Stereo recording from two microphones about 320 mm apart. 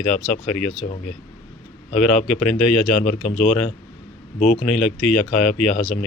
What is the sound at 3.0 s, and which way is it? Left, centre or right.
Speech, left.